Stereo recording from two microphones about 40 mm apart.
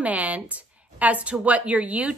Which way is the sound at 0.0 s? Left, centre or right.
Right.